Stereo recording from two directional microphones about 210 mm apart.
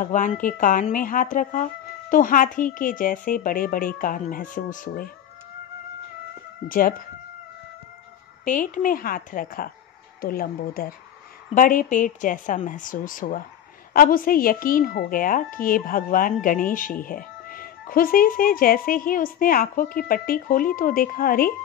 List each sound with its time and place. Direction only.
0.0 s speech: 40° left (ahead or behind)
6.7 s speech: 40° left (ahead or behind)
8.5 s a woman's voice: 40° left (ahead or behind)